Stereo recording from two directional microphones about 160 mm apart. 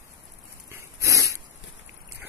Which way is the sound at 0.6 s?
20° right (ahead or behind).